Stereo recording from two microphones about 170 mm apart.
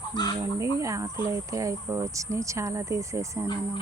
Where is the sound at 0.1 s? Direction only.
25° left (ahead or behind).